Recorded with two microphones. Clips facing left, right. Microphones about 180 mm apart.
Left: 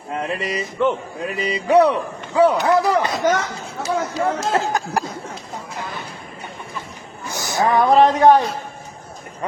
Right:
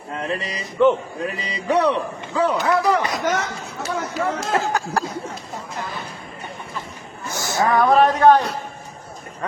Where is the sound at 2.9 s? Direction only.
30° left (ahead or behind).